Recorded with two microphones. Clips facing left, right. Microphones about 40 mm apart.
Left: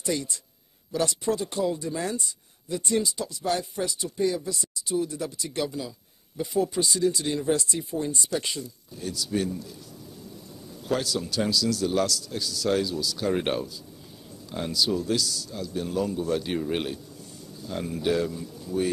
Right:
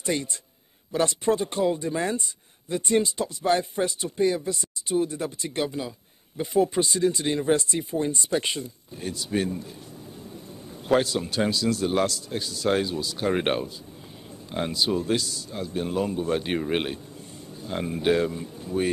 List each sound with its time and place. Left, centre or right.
0.0 s speech: right